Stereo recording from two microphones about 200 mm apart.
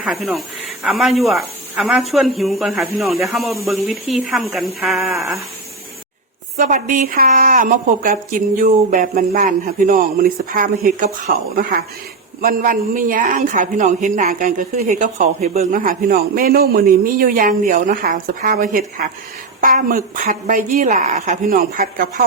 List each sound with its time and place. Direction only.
0.0 s speech: 5° right (ahead or behind)
6.6 s a woman's voice: 40° right (ahead or behind)
12.4 s a woman's voice: 45° right (ahead or behind)